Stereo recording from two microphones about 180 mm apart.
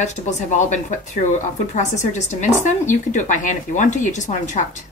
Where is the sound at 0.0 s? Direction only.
40° left (ahead or behind).